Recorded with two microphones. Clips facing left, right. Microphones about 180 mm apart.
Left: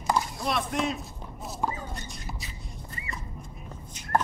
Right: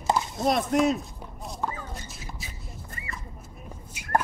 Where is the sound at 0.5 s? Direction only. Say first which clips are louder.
Right 8 dB; 40° right (ahead or behind).